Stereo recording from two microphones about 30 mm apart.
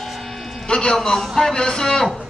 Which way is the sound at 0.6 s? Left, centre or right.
Left.